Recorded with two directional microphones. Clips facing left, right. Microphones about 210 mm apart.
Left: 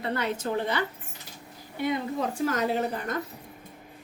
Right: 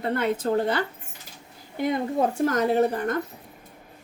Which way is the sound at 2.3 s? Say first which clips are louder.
Right 4 dB; 50° right (ahead or behind).